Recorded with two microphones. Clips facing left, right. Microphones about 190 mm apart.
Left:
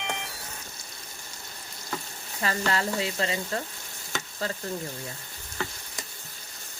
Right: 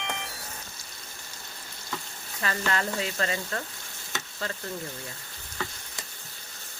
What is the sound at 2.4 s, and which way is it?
Frying, 30° left (ahead or behind).